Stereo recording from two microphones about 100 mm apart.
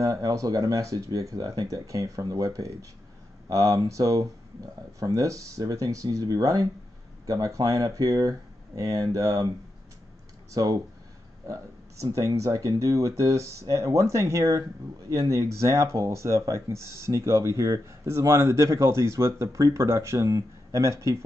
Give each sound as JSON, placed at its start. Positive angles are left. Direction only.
{"t": 0.0, "sound": "speech", "side_deg": -35}
{"t": 10.5, "sound": "speech", "side_deg": -35}